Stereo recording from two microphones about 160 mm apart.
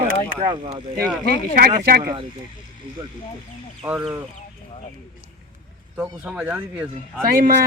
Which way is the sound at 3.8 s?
5° right (ahead or behind).